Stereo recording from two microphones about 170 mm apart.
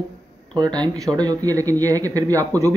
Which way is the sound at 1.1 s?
20° right (ahead or behind).